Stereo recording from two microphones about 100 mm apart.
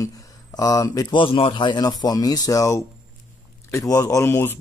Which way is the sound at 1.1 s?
60° left (ahead or behind).